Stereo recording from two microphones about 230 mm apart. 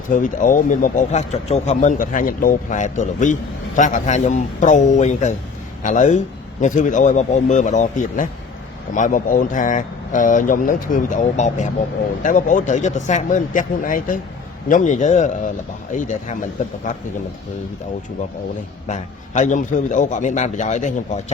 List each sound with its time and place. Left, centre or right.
0.1 s speech: left
18.9 s speech: left